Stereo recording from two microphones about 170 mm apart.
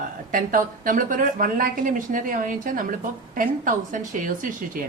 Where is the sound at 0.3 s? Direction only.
55° right (ahead or behind).